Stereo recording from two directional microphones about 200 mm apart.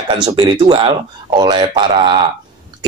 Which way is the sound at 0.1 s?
20° right (ahead or behind).